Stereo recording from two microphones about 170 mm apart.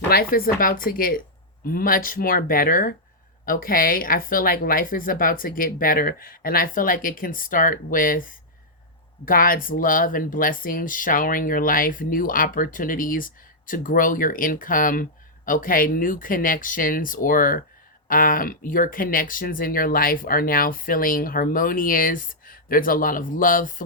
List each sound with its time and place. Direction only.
0.1 s speech: 60° left (ahead or behind)